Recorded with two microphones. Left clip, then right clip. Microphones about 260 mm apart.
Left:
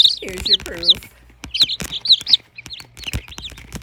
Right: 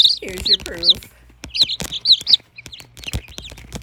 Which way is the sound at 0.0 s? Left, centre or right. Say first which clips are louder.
Even; centre.